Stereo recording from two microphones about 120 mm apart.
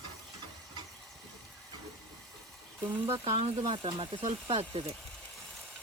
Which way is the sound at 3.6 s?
45° right (ahead or behind).